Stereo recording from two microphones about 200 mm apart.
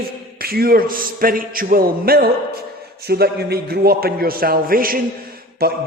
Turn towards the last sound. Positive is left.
turn(degrees=-50)  # may be behind; listen again after turning